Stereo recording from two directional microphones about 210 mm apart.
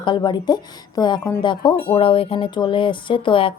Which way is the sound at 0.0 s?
20° left (ahead or behind).